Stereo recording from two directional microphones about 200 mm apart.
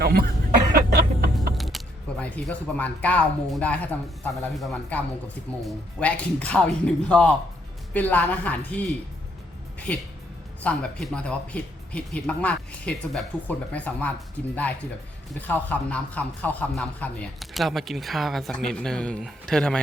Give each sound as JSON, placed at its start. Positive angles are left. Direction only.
{"t": 0.0, "sound": "cough", "side_deg": -50}
{"t": 0.7, "sound": "a sound", "side_deg": -50}
{"t": 1.5, "sound": "speech", "side_deg": 0}
{"t": 9.9, "sound": "speech", "side_deg": 5}
{"t": 15.4, "sound": "speech", "side_deg": 10}